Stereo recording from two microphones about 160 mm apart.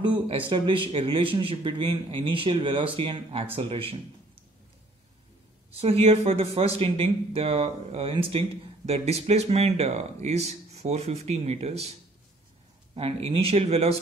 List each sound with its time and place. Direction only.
0.0 s speech: 30° right (ahead or behind)
5.8 s speech: 40° right (ahead or behind)
12.9 s speech: 35° right (ahead or behind)